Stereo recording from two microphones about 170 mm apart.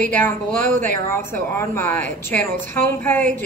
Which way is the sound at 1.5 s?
15° left (ahead or behind).